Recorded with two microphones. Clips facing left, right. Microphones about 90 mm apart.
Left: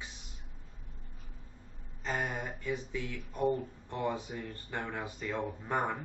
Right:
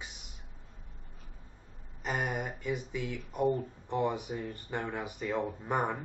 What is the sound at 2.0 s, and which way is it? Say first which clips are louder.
Speech: right 2 dB; 15° right (ahead or behind).